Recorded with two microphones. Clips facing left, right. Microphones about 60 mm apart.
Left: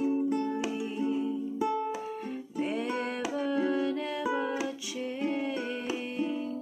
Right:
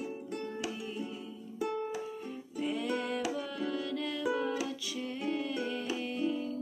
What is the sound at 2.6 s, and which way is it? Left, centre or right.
Music, left.